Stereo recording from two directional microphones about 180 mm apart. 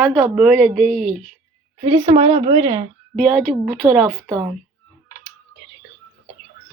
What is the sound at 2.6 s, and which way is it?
Speech, 20° right (ahead or behind).